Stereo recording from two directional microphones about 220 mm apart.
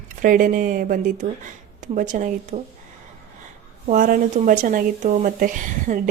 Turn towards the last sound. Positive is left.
turn(degrees=-35)  # may be behind; listen again after turning